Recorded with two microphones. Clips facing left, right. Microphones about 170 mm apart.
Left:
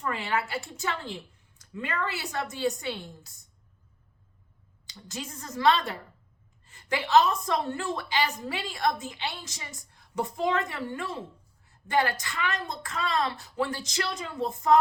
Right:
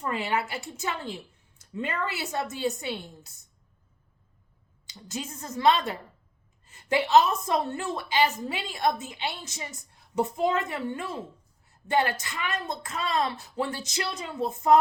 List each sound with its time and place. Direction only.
0.0 s a woman's voice: 20° right (ahead or behind)
4.9 s a woman's voice: 20° right (ahead or behind)